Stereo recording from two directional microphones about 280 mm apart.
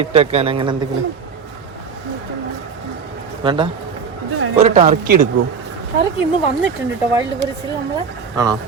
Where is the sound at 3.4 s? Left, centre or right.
Centre.